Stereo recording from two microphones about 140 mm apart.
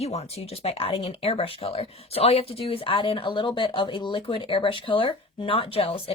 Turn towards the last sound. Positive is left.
turn(degrees=40)  # may be behind; listen again after turning